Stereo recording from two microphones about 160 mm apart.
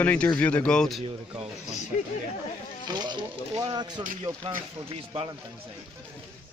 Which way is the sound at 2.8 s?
25° right (ahead or behind).